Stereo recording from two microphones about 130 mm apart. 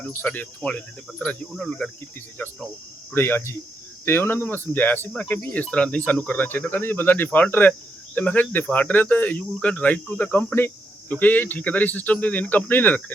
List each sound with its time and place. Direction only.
0.0 s speech: 15° left (ahead or behind)